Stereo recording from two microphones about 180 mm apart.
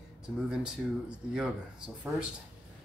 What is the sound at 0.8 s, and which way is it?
Speech, centre (ahead or behind).